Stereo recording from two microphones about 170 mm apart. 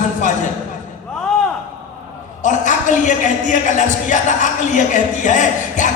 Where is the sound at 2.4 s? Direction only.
45° left (ahead or behind).